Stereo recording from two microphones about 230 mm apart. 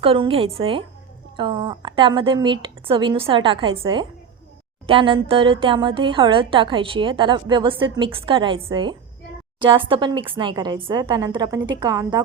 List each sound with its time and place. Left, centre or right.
0.0 s a woman's voice: right